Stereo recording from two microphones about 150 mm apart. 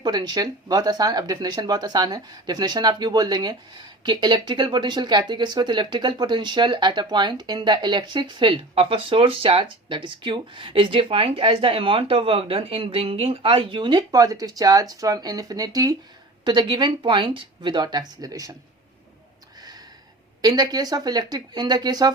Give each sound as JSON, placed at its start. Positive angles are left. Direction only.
{"t": 0.0, "sound": "speech", "side_deg": -30}
{"t": 20.4, "sound": "speech", "side_deg": -25}